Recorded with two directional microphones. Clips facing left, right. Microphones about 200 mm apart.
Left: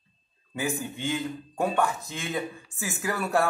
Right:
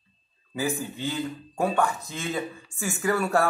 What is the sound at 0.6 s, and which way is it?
Speech, centre (ahead or behind).